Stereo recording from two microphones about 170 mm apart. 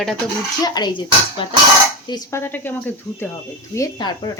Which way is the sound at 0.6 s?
25° left (ahead or behind).